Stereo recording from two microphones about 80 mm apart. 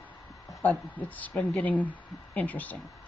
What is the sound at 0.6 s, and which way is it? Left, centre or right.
Speech, centre.